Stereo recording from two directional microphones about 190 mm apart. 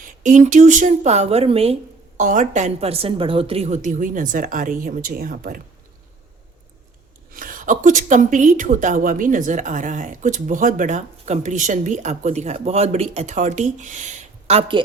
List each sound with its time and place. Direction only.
0.0 s a woman's voice: 40° right (ahead or behind)
7.3 s a woman's voice: 45° right (ahead or behind)